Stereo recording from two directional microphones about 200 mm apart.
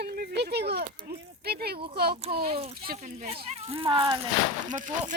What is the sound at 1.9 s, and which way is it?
Speech, 50° right (ahead or behind).